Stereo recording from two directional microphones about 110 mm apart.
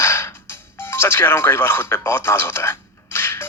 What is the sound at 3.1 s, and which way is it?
Music, 20° left (ahead or behind).